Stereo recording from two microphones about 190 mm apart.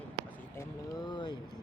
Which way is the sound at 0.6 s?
20° left (ahead or behind).